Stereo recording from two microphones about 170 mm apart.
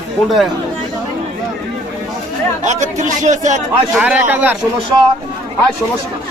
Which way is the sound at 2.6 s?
45° right (ahead or behind).